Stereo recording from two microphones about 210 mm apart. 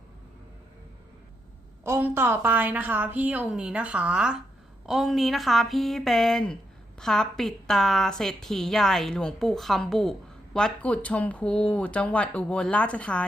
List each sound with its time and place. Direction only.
1.8 s a woman's voice: 10° right (ahead or behind); by 13.2 s 5° left (ahead or behind)